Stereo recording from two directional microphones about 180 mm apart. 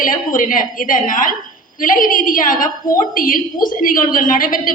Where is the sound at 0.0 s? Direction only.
50° left (ahead or behind).